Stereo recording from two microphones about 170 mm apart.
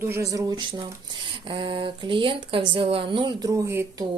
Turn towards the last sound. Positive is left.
turn(degrees=-15)  # may be behind; listen again after turning